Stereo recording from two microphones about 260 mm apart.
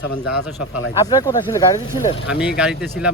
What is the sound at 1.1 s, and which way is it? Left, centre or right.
Speech, centre.